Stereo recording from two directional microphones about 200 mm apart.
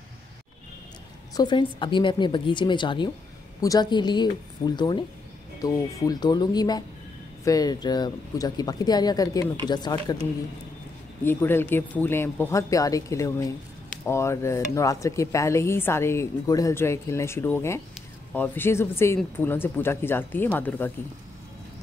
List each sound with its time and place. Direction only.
1.3 s speech: 20° left (ahead or behind)
11.2 s speech: 10° left (ahead or behind)